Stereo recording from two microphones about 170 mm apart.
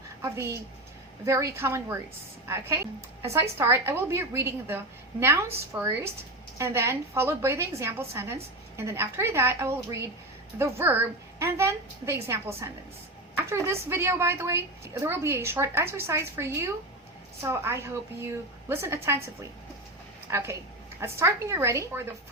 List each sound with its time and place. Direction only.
0.2 s a woman's voice: 15° right (ahead or behind)